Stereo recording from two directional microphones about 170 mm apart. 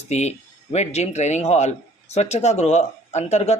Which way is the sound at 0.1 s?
40° left (ahead or behind).